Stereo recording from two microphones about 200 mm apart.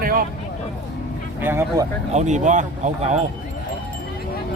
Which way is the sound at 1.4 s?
10° right (ahead or behind).